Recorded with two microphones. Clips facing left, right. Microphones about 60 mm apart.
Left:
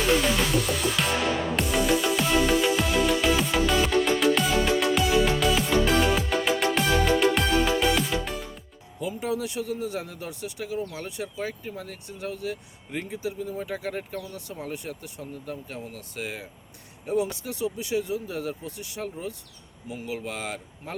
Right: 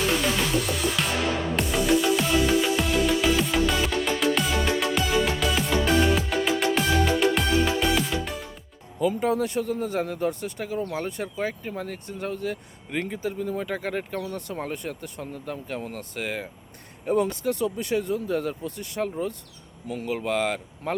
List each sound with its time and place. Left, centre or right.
1.0 s music: centre
9.0 s speech: right